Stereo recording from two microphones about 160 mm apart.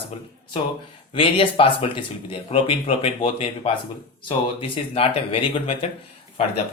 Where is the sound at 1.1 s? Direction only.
35° left (ahead or behind).